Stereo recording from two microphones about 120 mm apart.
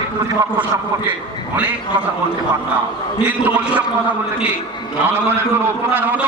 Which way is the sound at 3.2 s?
15° right (ahead or behind).